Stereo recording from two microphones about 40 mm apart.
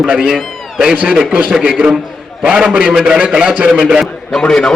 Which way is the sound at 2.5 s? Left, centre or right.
Right.